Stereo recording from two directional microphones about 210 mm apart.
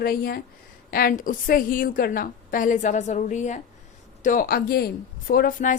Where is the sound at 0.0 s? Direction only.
45° left (ahead or behind).